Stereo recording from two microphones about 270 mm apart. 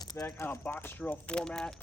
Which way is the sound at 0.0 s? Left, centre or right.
Centre.